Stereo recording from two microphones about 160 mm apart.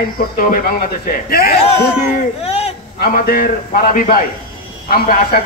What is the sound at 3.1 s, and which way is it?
A man's voice, 65° left (ahead or behind).